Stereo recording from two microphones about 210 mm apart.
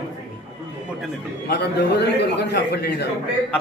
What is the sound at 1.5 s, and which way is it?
A man's voice, 50° left (ahead or behind).